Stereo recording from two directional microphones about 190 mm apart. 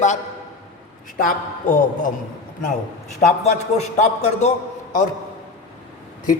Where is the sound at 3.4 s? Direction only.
35° left (ahead or behind).